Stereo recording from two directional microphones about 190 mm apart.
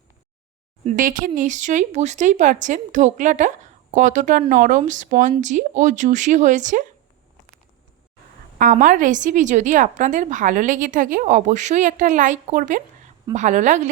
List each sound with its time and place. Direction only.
0.9 s a woman's voice: 45° right (ahead or behind)
8.5 s a woman's voice: 45° right (ahead or behind)